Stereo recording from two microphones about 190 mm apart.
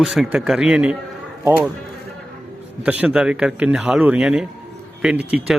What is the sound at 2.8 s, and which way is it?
Speech, 5° right (ahead or behind).